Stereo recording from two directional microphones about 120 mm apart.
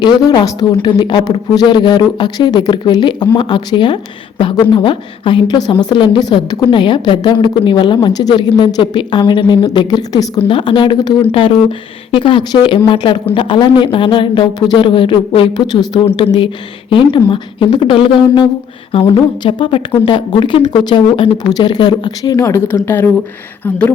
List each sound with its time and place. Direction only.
0.0 s a woman's voice: 35° left (ahead or behind)
11.2 s a woman's voice: 50° left (ahead or behind)
16.0 s a woman's voice: 55° left (ahead or behind); by 23.9 s 10° left (ahead or behind)